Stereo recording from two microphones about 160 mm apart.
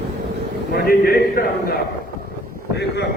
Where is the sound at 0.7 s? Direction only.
70° left (ahead or behind).